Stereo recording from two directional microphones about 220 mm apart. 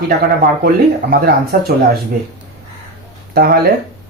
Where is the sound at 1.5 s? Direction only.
45° right (ahead or behind).